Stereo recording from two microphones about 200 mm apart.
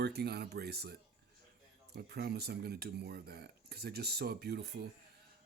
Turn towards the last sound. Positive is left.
turn(degrees=-55)  # may be behind; listen again after turning